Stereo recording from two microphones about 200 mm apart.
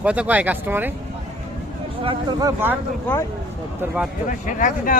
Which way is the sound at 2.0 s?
20° right (ahead or behind).